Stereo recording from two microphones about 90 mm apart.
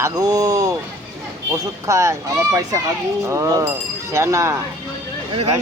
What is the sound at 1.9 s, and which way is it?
Speech, 35° right (ahead or behind).